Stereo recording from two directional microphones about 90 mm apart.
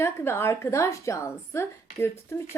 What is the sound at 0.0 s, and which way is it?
A woman's voice, 30° left (ahead or behind).